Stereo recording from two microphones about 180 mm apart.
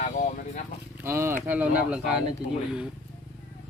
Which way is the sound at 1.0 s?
15° right (ahead or behind).